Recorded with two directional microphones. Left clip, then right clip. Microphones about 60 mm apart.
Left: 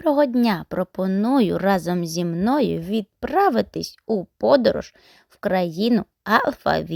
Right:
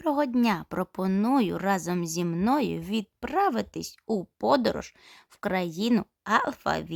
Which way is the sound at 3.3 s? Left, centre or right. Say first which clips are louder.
Left 7 dB; left.